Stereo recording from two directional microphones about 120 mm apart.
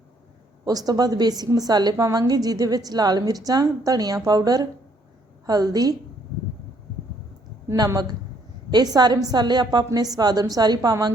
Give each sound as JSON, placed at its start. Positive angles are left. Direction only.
{"t": 0.6, "sound": "a woman's voice", "side_deg": -30}
{"t": 7.7, "sound": "a woman's voice", "side_deg": -25}